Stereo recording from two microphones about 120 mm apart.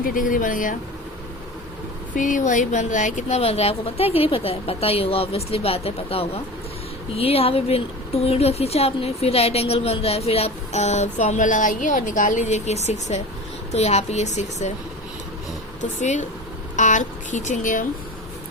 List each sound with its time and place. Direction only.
0.3 s speech: 90° left
2.1 s a woman's voice: 90° left; by 14.7 s 70° left (ahead or behind)
15.8 s speech: 85° left